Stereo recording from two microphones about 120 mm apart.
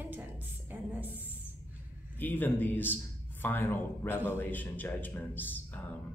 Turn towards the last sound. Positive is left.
turn(degrees=15)  # may be behind; listen again after turning